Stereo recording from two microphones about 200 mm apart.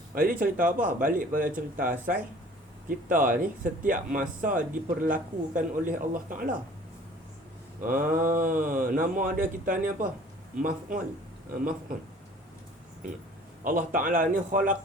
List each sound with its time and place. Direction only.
0.1 s a man's voice: 45° right (ahead or behind)
7.8 s a man's voice: 40° right (ahead or behind)
13.7 s a man's voice: 40° right (ahead or behind)